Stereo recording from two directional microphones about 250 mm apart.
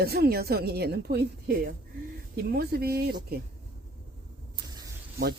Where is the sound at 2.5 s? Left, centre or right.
Right.